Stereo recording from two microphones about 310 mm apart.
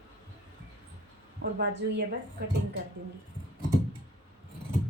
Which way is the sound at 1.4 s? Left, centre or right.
Right.